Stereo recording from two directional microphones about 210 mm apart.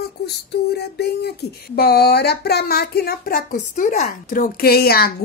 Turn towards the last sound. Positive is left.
turn(degrees=45)  # may be behind; listen again after turning